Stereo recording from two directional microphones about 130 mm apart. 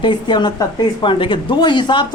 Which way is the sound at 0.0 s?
35° left (ahead or behind).